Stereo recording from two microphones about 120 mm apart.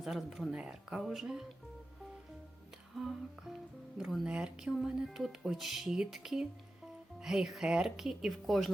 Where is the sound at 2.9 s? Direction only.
Centre (ahead or behind).